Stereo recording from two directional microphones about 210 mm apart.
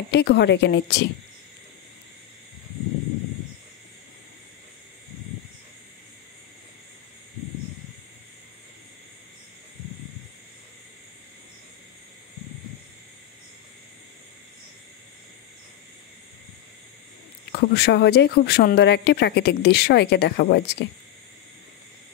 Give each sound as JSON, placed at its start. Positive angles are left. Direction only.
{"t": 0.1, "sound": "speech", "side_deg": 55}
{"t": 17.5, "sound": "speech", "side_deg": 50}